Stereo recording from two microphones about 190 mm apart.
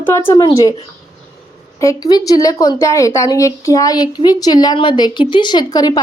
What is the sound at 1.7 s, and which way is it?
A woman's voice, 20° left (ahead or behind).